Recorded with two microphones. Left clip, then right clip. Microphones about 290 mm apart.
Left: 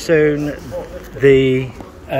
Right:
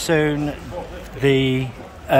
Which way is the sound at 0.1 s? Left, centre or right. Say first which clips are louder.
Left 6 dB; centre.